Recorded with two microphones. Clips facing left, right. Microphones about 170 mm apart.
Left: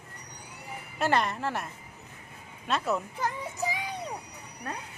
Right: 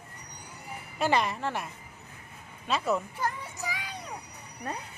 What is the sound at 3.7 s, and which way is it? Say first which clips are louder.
Child singing: left 4 dB; 20° left (ahead or behind).